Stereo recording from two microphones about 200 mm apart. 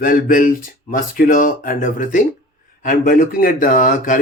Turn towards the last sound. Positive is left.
turn(degrees=40)  # may be behind; listen again after turning